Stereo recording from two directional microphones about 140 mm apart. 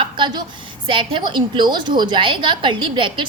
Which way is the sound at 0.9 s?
35° right (ahead or behind).